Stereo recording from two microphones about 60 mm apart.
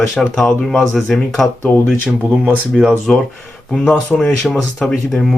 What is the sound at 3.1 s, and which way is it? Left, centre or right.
Speech, centre.